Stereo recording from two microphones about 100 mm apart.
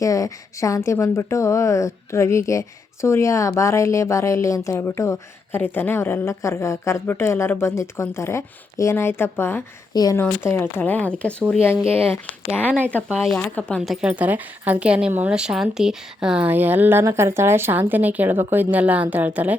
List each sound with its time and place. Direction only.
0.0 s a woman's voice: 30° left (ahead or behind)
9.9 s speech: 40° left (ahead or behind)
10.4 s speech: 20° left (ahead or behind)
13.8 s a woman's voice: centre (ahead or behind)
14.1 s speech: 15° right (ahead or behind)